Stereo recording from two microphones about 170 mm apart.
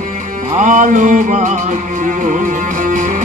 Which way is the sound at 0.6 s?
50° right (ahead or behind).